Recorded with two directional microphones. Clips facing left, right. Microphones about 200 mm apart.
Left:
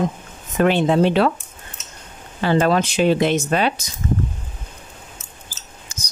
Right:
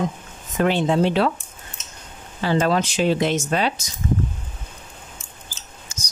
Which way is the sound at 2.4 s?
60° left (ahead or behind).